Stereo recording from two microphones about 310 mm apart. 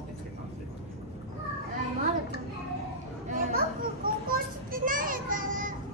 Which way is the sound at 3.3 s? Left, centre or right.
Right.